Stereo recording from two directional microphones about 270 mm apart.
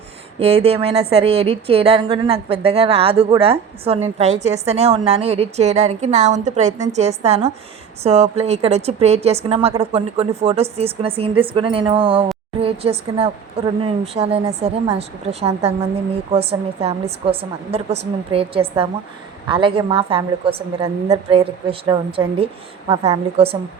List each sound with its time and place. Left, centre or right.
0.3 s a woman's voice: right